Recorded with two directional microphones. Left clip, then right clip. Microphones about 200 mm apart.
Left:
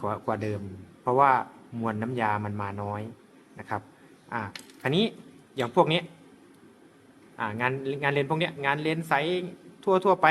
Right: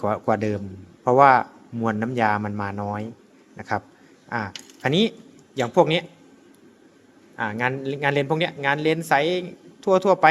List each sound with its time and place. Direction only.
0.0 s speech: 25° right (ahead or behind)
7.3 s speech: 25° right (ahead or behind)